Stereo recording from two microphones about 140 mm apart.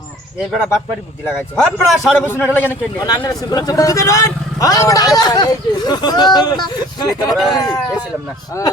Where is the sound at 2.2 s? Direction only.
15° left (ahead or behind).